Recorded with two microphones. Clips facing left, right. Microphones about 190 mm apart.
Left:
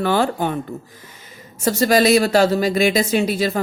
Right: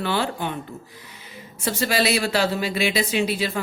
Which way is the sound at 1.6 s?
45° left (ahead or behind).